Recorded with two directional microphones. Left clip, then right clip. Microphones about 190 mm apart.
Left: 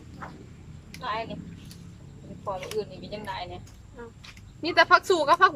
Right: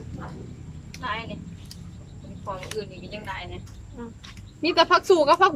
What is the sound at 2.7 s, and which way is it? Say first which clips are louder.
Speech: left 1 dB; 20° left (ahead or behind).